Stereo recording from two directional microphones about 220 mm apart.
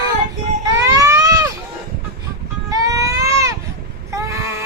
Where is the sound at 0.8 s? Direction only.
15° right (ahead or behind).